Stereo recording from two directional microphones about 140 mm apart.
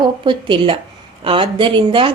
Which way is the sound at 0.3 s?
35° right (ahead or behind).